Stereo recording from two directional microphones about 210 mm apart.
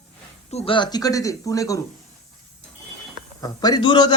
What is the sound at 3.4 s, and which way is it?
Speech, 20° left (ahead or behind).